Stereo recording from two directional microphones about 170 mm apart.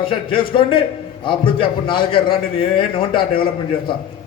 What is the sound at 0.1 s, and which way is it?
A man's voice, 30° left (ahead or behind).